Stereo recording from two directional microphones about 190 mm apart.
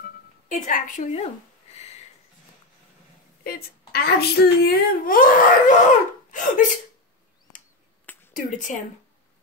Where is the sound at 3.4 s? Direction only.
55° left (ahead or behind).